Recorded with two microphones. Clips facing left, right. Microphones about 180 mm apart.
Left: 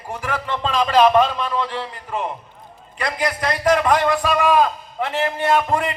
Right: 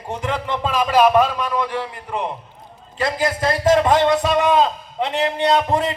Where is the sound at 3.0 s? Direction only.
25° right (ahead or behind).